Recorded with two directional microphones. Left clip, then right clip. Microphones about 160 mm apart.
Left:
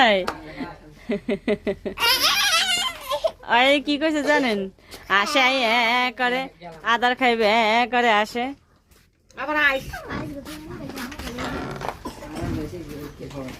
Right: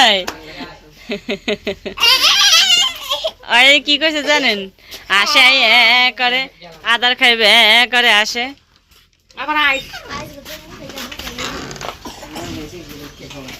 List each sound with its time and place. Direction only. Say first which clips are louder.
0.0 s speech: right 6 dB; 20° left (ahead or behind)
0.4 s crying: right 4 dB; 20° left (ahead or behind)
5.0 s a woman's voice: right 8 dB; 15° left (ahead or behind)
9.3 s speech: right 5 dB; 25° right (ahead or behind)